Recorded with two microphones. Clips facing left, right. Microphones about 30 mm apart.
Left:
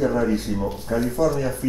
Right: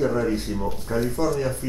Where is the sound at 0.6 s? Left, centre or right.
Centre.